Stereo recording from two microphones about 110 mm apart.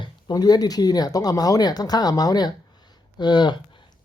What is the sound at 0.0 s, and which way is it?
Speech, 40° left (ahead or behind).